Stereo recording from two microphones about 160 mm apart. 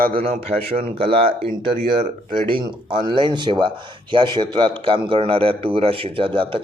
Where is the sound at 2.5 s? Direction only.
30° right (ahead or behind).